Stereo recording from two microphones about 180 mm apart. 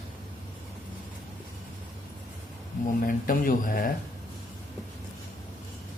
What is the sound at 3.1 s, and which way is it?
Speech, 50° left (ahead or behind).